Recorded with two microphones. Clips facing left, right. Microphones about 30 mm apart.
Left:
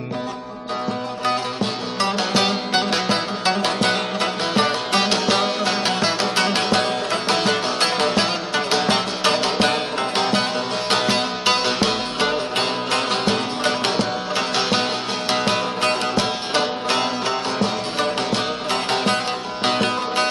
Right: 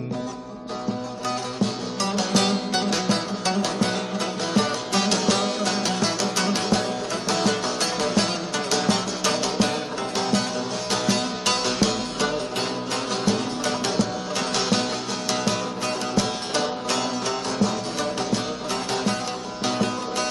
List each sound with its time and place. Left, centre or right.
1.2 s music: left
12.5 s music: left
15.8 s music: left
16.5 s music: left